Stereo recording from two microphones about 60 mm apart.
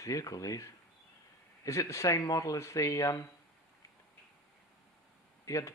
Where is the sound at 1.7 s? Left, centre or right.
Left.